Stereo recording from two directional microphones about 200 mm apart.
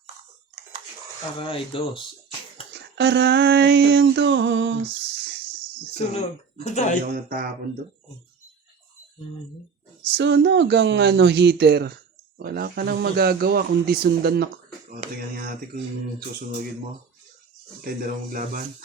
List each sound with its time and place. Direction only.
1.4 s speech: 25° left (ahead or behind)
2.7 s a sound: 60° right (ahead or behind)
6.1 s speech: 35° left (ahead or behind)
7.0 s speech: 50° right (ahead or behind)
10.1 s a sound: 60° right (ahead or behind)
12.4 s speech: 50° right (ahead or behind)
17.8 s speech: 45° right (ahead or behind)